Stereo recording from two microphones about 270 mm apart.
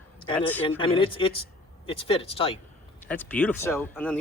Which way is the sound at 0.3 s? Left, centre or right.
Centre.